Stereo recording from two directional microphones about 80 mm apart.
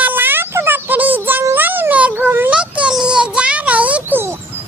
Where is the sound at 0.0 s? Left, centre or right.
Right.